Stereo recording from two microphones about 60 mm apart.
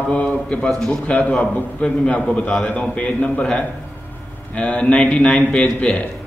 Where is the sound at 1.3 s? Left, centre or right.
Centre.